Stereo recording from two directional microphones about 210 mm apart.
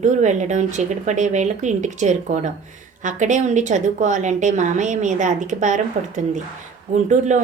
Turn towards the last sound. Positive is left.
turn(degrees=-35)  # may be behind; listen again after turning